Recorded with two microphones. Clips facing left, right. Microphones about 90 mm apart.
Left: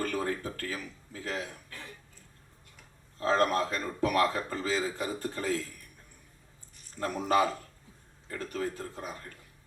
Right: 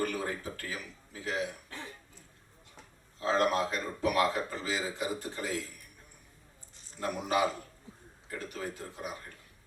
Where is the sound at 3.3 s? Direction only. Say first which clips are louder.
Left 1 dB; 15° right (ahead or behind).